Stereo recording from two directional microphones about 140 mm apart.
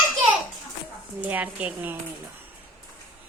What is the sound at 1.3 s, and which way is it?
Speech, 10° right (ahead or behind).